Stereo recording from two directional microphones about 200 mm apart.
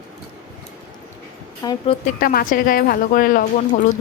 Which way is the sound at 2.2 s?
45° left (ahead or behind).